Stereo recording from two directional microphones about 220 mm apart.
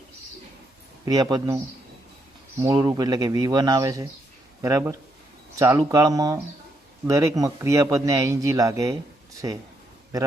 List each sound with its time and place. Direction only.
1.0 s a man's voice: 15° right (ahead or behind)